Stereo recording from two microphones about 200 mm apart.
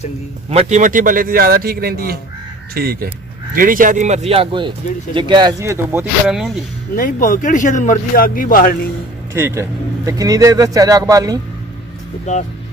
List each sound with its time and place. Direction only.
0.5 s a man's voice: 35° right (ahead or behind); by 6.5 s 5° right (ahead or behind)
6.9 s speech: 45° left (ahead or behind)
9.3 s speech: 15° right (ahead or behind)
12.2 s speech: 35° left (ahead or behind)